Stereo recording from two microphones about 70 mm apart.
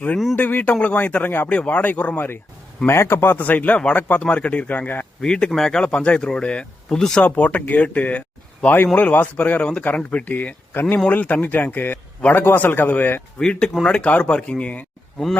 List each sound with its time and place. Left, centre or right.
0.3 s speech: left
2.8 s speech: left
5.2 s speech: centre
7.2 s speech: left
10.8 s speech: left
13.4 s speech: centre